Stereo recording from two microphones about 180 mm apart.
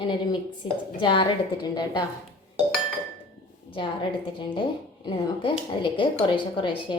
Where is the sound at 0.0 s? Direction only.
25° left (ahead or behind).